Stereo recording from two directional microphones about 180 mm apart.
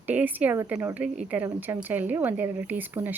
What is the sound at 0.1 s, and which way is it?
A woman's voice, 10° right (ahead or behind).